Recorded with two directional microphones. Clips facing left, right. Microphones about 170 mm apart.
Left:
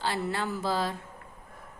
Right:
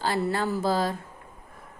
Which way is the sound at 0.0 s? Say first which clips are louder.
Right 4 dB; 40° right (ahead or behind).